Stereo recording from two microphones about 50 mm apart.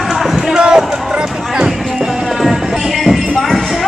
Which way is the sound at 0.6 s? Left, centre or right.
Centre.